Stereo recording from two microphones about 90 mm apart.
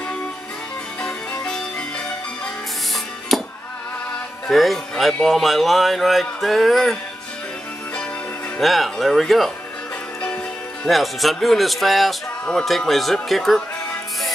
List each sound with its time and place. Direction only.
1.0 s music: 10° left (ahead or behind)
3.3 s music: 5° left (ahead or behind)
4.5 s speech: centre (ahead or behind)
8.5 s speech: centre (ahead or behind)
10.2 s music: 15° left (ahead or behind)
10.9 s speech: centre (ahead or behind)